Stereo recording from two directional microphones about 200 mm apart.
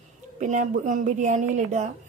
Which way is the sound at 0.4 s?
40° right (ahead or behind).